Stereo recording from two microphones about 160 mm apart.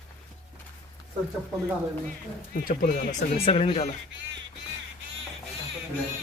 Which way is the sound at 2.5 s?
60° left (ahead or behind).